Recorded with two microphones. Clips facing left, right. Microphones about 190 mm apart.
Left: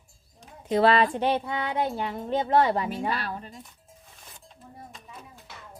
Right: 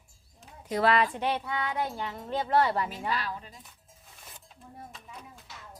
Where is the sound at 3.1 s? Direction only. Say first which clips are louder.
Left 2 dB; 55° left (ahead or behind).